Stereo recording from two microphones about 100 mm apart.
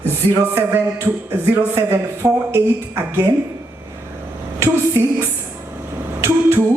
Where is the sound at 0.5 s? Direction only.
20° right (ahead or behind).